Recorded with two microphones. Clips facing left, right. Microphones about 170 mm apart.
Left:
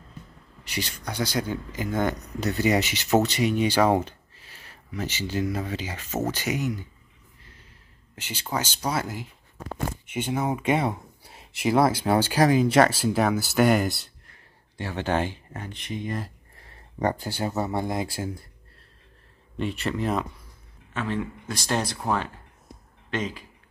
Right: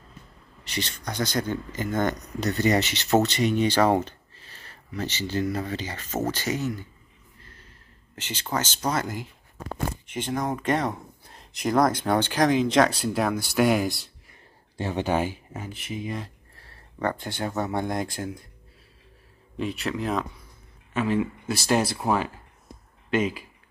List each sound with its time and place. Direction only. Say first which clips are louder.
0.7 s speech: even; 10° left (ahead or behind)
8.2 s speech: right 1 dB; 10° left (ahead or behind)
14.8 s speech: right 1 dB; 20° right (ahead or behind); by 16.3 s centre (ahead or behind)
16.5 s a sound: left 3 dB; 15° left (ahead or behind)
17.2 s speech: left 1 dB; 5° left (ahead or behind)
19.5 s speech: even; centre (ahead or behind)